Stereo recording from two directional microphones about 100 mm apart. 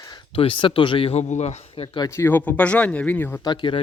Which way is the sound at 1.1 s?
90° left.